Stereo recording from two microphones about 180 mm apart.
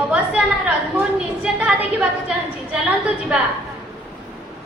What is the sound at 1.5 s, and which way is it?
Speech, 5° right (ahead or behind).